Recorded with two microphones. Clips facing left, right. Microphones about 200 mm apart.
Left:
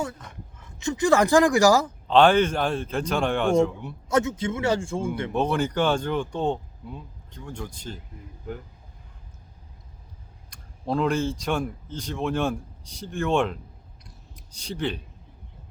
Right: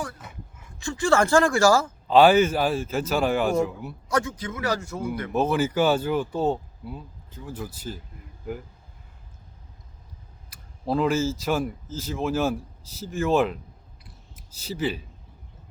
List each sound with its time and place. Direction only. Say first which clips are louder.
0.2 s a sound: right 1 dB; 5° right (ahead or behind)
0.8 s speech: left 1 dB; 20° left (ahead or behind)
2.0 s speech: right 2 dB; 5° right (ahead or behind)
4.1 s speech: left 3 dB; 25° left (ahead or behind)
5.3 s speech: right 3 dB; 5° right (ahead or behind)
10.5 s speech: right 1 dB; 5° right (ahead or behind)
14.0 s scissors: left 1 dB; 5° right (ahead or behind)